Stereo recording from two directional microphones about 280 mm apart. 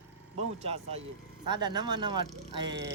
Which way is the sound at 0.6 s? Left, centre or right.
Right.